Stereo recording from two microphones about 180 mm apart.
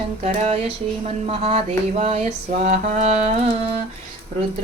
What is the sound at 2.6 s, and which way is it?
Speech, 40° right (ahead or behind).